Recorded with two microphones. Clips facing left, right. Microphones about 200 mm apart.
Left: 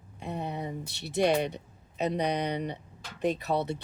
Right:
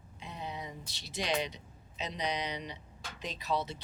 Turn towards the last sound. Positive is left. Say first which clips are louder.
# left 5 dB
turn(degrees=60)  # may be behind; listen again after turning